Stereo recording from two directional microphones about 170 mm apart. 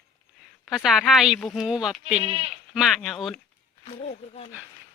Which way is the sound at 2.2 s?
35° right (ahead or behind).